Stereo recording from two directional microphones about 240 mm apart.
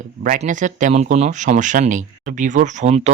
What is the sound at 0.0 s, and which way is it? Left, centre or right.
Speech, right.